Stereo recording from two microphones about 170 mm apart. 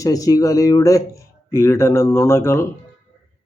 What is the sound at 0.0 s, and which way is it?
Speech, 20° left (ahead or behind).